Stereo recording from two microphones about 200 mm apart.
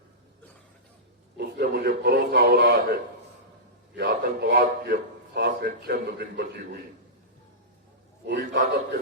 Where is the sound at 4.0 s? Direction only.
60° right (ahead or behind).